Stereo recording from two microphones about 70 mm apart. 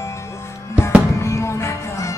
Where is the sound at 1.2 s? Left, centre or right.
Left.